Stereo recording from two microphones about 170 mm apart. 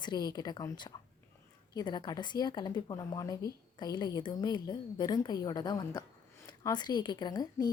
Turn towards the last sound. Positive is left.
turn(degrees=25)  # may be behind; listen again after turning